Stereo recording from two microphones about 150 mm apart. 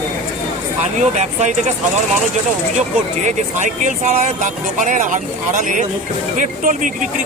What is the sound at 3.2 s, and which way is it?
Speech, 55° right (ahead or behind).